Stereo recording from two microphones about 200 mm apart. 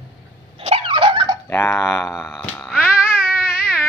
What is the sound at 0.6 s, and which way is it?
Dog, 30° right (ahead or behind).